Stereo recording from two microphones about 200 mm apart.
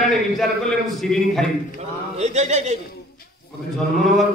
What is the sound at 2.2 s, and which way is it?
Speech, 35° right (ahead or behind).